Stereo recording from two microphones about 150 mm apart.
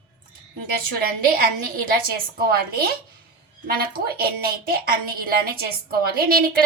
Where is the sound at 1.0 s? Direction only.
75° right (ahead or behind).